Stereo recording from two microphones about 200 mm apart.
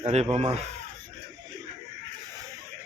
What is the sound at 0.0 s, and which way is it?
Speech, 30° right (ahead or behind).